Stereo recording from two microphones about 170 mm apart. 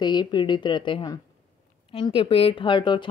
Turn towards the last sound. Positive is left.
turn(degrees=30)  # may be behind; listen again after turning